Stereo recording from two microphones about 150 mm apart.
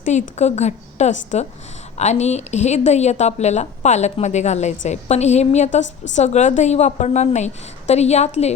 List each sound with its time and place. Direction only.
0.0 s a woman's voice: 50° left (ahead or behind)